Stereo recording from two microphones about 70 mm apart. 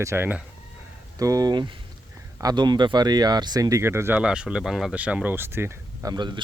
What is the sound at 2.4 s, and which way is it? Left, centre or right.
Speech, right.